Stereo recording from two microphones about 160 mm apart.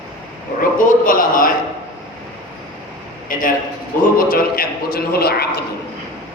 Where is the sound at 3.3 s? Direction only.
60° left (ahead or behind).